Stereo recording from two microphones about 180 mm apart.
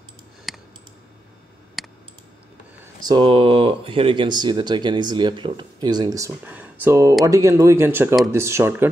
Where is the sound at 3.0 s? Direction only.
25° right (ahead or behind).